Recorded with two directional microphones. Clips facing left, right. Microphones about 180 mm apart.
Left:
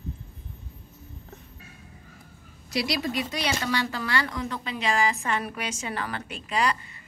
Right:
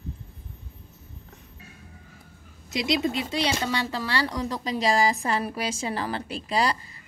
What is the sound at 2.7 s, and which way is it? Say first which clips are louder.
A woman's voice: right 2 dB; 20° right (ahead or behind).